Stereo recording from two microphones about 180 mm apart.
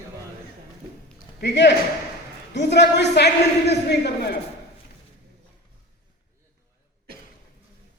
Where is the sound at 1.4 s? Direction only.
75° left (ahead or behind).